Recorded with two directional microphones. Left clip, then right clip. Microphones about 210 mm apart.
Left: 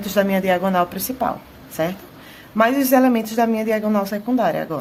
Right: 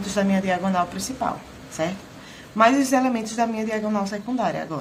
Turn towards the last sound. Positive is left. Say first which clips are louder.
# left 5 dB
turn(degrees=45)  # may be behind; listen again after turning